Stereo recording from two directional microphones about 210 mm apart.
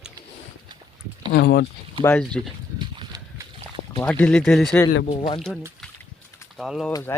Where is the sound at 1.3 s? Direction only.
50° left (ahead or behind).